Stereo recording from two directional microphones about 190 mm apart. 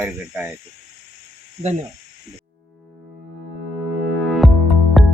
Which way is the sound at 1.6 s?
30° right (ahead or behind).